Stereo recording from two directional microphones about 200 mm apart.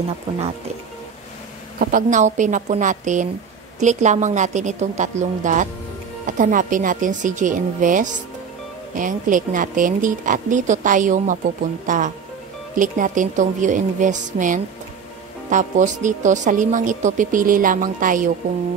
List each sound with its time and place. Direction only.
1.8 s speech: 45° right (ahead or behind)